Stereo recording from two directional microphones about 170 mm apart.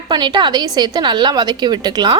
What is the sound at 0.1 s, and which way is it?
A woman's voice, 25° right (ahead or behind).